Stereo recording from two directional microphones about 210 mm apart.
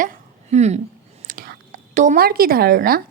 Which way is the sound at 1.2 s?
45° right (ahead or behind).